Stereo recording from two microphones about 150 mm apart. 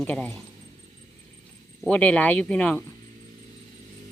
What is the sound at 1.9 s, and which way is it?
Speech, 10° left (ahead or behind).